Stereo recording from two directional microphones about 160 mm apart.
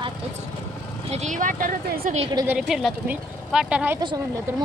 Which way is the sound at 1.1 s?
50° right (ahead or behind).